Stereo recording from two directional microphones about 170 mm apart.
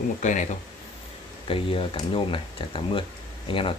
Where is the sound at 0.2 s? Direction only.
45° left (ahead or behind).